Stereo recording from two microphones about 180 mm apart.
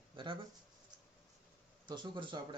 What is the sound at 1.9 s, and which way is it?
Speech, 25° right (ahead or behind).